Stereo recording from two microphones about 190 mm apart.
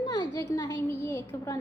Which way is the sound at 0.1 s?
20° left (ahead or behind).